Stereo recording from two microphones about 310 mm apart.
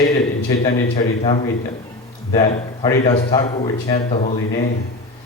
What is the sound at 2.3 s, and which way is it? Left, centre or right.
A man's voice, centre.